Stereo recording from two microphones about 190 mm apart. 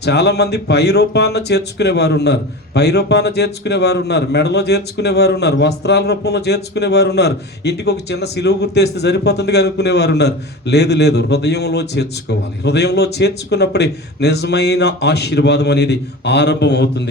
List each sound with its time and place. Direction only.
0.0 s speech: 60° left (ahead or behind)